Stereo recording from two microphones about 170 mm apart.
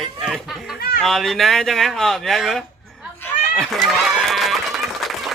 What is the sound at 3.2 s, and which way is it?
Chicken, 5° left (ahead or behind).